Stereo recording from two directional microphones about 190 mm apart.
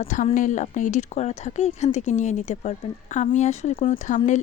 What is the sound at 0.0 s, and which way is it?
A woman's voice, 40° left (ahead or behind).